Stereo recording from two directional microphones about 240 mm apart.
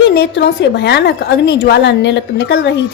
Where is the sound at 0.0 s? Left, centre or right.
Left.